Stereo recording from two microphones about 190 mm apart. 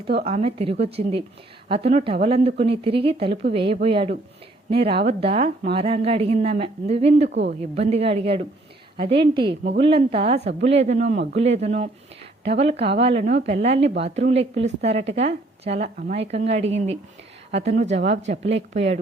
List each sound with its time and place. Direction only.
0.3 s a woman's voice: 30° right (ahead or behind)